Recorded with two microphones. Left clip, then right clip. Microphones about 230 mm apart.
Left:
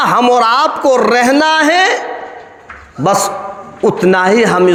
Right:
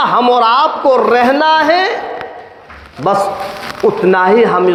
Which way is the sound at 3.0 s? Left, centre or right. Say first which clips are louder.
Even; left.